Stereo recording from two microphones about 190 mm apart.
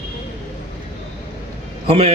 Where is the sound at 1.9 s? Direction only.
35° right (ahead or behind).